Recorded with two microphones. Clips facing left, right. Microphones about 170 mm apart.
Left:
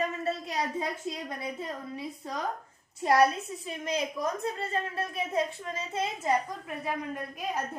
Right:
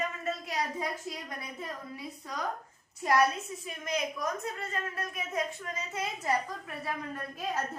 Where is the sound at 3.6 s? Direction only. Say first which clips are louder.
Left 2 dB; 30° left (ahead or behind).